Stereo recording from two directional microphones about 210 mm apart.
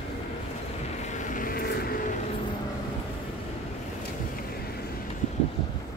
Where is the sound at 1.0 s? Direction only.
35° left (ahead or behind).